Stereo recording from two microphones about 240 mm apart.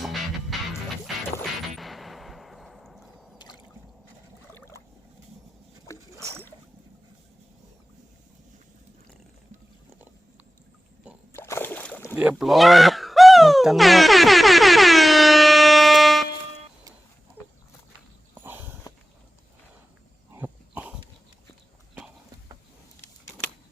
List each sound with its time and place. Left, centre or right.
0.5 s music: centre
3.3 s rowboat: centre
4.5 s a sound: centre
5.9 s rowboat: centre
11.3 s boat: centre
12.1 s music: centre
18.3 s a sound: centre
20.3 s dog: centre